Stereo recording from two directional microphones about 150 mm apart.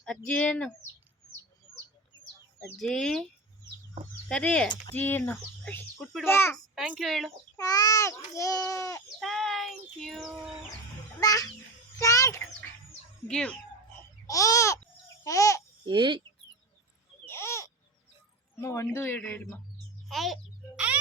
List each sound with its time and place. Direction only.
0.3 s speech: 5° left (ahead or behind)
2.7 s child singing: centre (ahead or behind)
4.3 s speech: 5° left (ahead or behind)
6.7 s child singing: 5° right (ahead or behind)
7.5 s speech: 25° left (ahead or behind)
9.2 s child singing: centre (ahead or behind)
11.2 s speech: 25° left (ahead or behind)
13.2 s a sound: 5° left (ahead or behind)
14.3 s speech: 20° left (ahead or behind)
15.2 s babbling: 20° left (ahead or behind)
15.9 s speech: 30° right (ahead or behind)
17.2 s a sound: 15° left (ahead or behind)
18.5 s speech: 20° left (ahead or behind)
20.1 s a child's voice: centre (ahead or behind)